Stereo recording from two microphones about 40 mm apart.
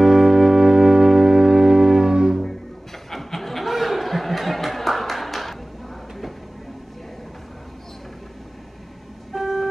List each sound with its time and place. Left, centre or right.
0.0 s music: centre
3.1 s a sound: centre
9.3 s vehicle: centre